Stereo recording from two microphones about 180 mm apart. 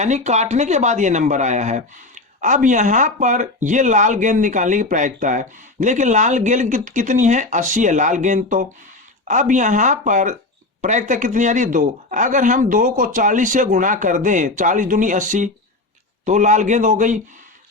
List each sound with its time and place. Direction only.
0.0 s speech: 40° right (ahead or behind)